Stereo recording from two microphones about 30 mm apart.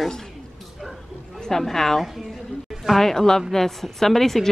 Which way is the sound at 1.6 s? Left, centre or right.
Centre.